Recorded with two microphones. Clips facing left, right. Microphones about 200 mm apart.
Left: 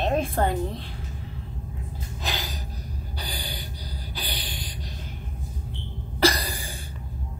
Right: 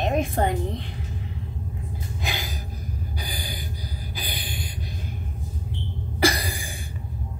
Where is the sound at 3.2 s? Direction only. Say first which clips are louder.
Right 1 dB; 10° right (ahead or behind).